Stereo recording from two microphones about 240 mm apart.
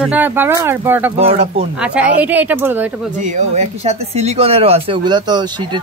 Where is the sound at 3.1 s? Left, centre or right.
Right.